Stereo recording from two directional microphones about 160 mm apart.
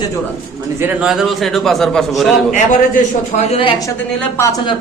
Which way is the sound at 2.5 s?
50° left (ahead or behind).